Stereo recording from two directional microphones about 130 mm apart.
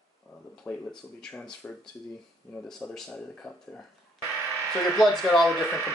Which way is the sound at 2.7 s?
5° left (ahead or behind).